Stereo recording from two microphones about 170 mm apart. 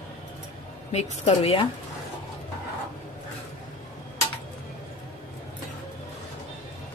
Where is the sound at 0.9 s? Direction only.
35° left (ahead or behind).